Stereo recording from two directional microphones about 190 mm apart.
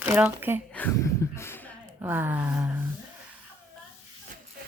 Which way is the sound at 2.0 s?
10° right (ahead or behind).